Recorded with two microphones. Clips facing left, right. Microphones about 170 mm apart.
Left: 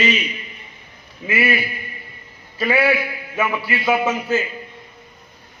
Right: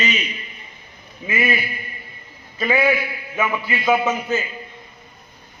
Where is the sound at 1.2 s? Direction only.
5° left (ahead or behind).